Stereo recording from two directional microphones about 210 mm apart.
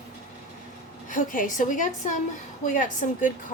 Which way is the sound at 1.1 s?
40° left (ahead or behind).